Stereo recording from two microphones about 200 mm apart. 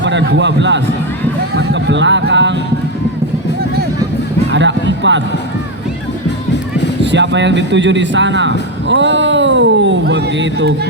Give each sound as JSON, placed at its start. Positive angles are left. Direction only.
{"t": 0.0, "sound": "a man's voice", "side_deg": -65}
{"t": 1.5, "sound": "a sound", "side_deg": -65}
{"t": 4.5, "sound": "music", "side_deg": -65}
{"t": 7.0, "sound": "speech", "side_deg": -60}